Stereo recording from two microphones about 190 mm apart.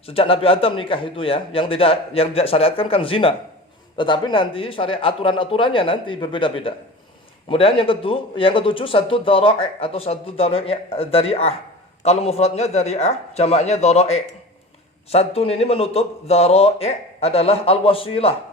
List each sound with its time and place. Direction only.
0.0 s a man's voice: 30° left (ahead or behind)